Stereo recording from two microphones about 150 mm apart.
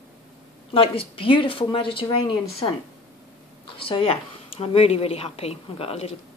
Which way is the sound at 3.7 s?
35° left (ahead or behind).